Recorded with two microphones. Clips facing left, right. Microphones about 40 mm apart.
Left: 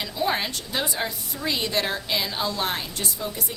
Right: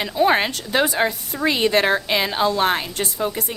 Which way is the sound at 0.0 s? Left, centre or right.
Right.